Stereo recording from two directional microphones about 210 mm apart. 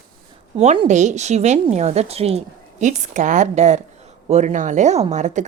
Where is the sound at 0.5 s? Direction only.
30° right (ahead or behind).